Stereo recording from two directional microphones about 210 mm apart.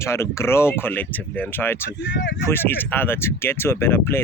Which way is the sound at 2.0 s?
60° left (ahead or behind).